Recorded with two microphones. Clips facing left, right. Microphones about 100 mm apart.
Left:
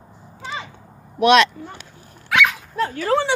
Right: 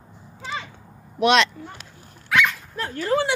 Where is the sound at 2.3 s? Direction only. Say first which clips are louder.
Left 2 dB; 70° left (ahead or behind).